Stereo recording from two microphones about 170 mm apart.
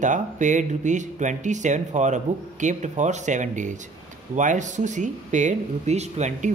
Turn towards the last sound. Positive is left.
turn(degrees=-40)  # may be behind; listen again after turning